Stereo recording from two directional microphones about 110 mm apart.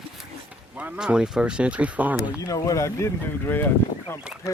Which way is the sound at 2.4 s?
30° left (ahead or behind).